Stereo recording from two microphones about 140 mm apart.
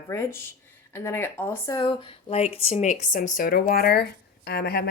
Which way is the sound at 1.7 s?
35° left (ahead or behind).